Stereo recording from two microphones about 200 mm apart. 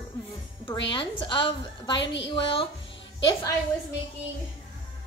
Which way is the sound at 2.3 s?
25° left (ahead or behind).